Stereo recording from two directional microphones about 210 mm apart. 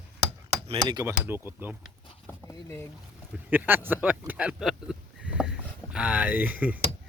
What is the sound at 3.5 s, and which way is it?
Speech, 10° right (ahead or behind).